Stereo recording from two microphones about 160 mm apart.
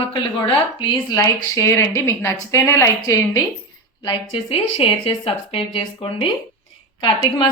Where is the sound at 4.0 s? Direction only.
30° left (ahead or behind).